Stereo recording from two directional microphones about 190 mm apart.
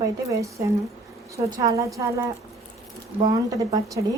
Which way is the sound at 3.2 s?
20° right (ahead or behind).